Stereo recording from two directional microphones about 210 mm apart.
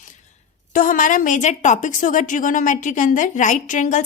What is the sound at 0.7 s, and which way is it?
A woman's voice, 40° left (ahead or behind).